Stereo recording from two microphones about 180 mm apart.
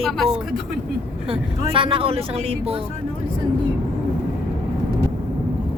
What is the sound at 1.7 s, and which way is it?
Speech, 30° right (ahead or behind).